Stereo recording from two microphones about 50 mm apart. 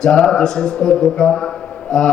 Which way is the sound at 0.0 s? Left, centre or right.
Centre.